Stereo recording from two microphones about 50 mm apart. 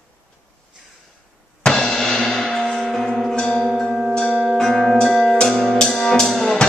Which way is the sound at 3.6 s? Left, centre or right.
Centre.